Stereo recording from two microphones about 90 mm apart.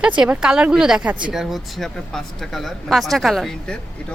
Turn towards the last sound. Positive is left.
turn(degrees=0)  # may be behind; listen again after turning